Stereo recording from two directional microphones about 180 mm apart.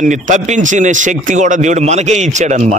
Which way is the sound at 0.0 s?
45° right (ahead or behind).